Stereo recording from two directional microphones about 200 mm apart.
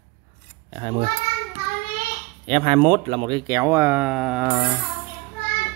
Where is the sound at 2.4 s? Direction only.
25° right (ahead or behind); by 4.6 s 5° right (ahead or behind).